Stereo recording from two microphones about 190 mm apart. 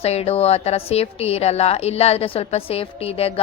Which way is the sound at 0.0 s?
30° left (ahead or behind).